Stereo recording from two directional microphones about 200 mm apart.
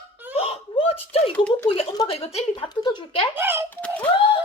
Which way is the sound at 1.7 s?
25° left (ahead or behind).